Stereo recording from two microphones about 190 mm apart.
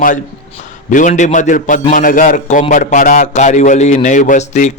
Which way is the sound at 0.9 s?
40° left (ahead or behind).